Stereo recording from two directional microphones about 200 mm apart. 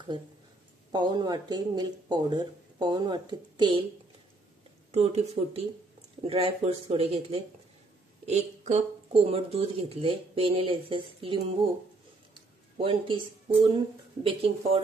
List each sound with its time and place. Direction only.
0.9 s speech: 20° right (ahead or behind)
4.9 s speech: 30° right (ahead or behind)
12.7 s speech: 25° right (ahead or behind)